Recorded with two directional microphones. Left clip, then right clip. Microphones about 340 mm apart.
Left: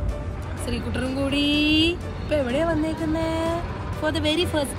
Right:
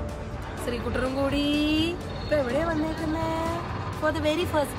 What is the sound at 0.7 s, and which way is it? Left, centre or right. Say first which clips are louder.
A woman's voice: right 1 dB; centre.